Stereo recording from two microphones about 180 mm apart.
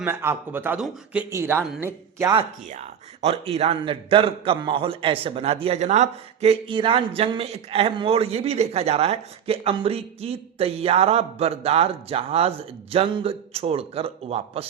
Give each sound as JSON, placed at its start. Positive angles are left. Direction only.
{"t": 0.0, "sound": "speech", "side_deg": -10}
{"t": 2.6, "sound": "a man's voice", "side_deg": -40}